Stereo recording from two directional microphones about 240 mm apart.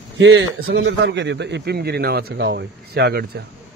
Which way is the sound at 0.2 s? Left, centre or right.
Right.